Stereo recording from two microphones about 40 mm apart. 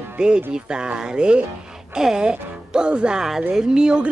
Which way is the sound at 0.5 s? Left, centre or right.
Right.